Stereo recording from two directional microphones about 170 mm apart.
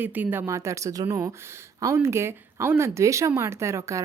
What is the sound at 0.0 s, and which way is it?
A woman's voice, 10° right (ahead or behind).